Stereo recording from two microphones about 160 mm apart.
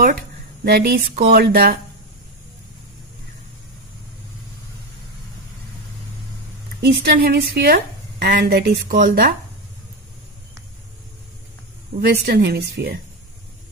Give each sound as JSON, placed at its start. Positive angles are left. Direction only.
{"t": 0.7, "sound": "speech", "side_deg": -85}
{"t": 6.8, "sound": "a woman's voice", "side_deg": -80}
{"t": 12.0, "sound": "speech", "side_deg": -85}